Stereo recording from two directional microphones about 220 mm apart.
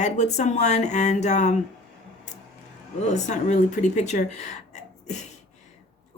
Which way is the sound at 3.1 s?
35° left (ahead or behind).